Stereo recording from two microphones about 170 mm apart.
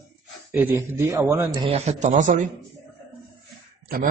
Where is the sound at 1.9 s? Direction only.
45° right (ahead or behind).